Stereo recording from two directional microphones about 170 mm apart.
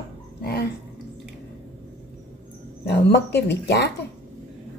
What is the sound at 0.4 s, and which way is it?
Dog, 70° left (ahead or behind).